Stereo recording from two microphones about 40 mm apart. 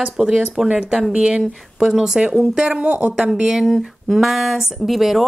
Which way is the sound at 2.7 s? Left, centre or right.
Right.